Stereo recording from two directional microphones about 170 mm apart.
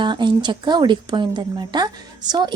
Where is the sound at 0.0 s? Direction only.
25° right (ahead or behind).